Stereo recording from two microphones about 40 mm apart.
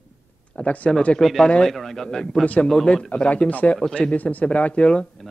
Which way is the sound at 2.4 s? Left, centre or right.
Left.